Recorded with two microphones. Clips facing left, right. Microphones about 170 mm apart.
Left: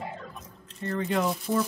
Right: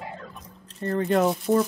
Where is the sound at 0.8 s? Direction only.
35° right (ahead or behind).